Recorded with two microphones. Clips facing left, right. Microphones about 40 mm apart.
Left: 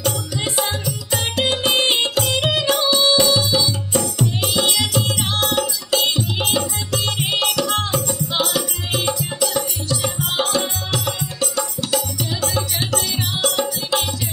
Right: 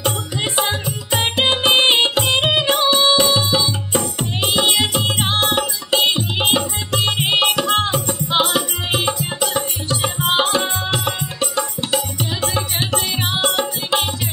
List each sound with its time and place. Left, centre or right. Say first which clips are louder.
0.0 s music: right 1 dB; right